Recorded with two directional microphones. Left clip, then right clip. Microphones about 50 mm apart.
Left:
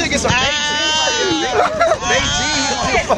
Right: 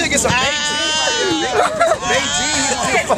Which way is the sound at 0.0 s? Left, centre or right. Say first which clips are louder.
Right 1 dB; right.